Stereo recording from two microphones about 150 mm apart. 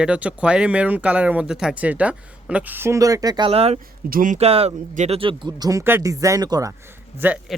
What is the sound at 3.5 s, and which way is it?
Speech, 40° right (ahead or behind).